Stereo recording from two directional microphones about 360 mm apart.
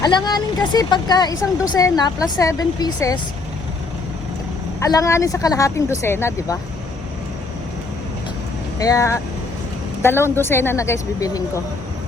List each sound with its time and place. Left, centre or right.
0.0 s speech: centre
4.8 s speech: centre
8.8 s a woman's voice: centre